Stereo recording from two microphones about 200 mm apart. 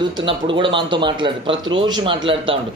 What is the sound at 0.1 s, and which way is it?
Speech, 25° right (ahead or behind).